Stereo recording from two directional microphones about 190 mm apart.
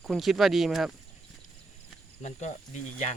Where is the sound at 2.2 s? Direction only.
40° left (ahead or behind).